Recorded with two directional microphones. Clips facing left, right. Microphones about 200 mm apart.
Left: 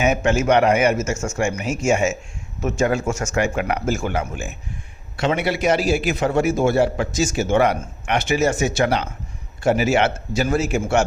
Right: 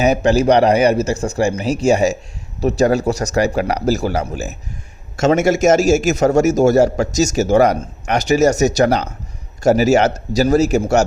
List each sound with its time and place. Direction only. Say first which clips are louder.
0.0 s a man's voice: right 5 dB; 35° right (ahead or behind)